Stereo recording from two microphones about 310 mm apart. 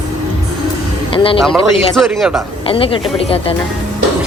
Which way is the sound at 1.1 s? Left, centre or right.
Centre.